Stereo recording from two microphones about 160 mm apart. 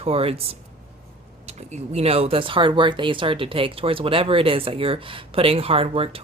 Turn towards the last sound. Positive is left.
turn(degrees=-35)  # may be behind; listen again after turning